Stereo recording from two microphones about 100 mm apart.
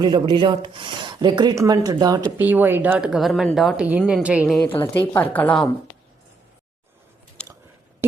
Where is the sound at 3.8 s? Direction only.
10° right (ahead or behind).